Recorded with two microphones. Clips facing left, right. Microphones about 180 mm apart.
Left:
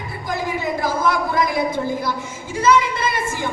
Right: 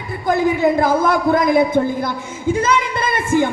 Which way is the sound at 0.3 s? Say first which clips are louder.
Right 9 dB; 55° right (ahead or behind).